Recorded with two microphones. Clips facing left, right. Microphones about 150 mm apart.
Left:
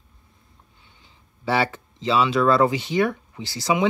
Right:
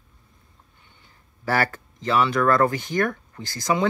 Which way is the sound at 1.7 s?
10° left (ahead or behind).